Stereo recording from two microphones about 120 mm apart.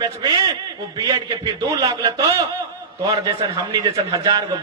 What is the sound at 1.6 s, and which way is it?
A man's voice, 30° right (ahead or behind).